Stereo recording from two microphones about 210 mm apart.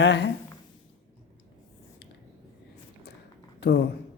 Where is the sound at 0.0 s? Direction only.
55° left (ahead or behind).